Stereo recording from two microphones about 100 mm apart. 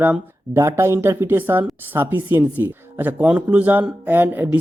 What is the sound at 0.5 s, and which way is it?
Speech, 30° right (ahead or behind).